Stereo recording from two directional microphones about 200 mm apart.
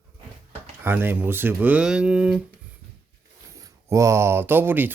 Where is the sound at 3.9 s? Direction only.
15° right (ahead or behind).